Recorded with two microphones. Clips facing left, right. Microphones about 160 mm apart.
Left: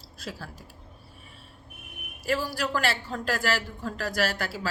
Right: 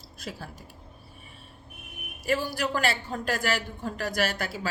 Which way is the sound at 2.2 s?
20° right (ahead or behind).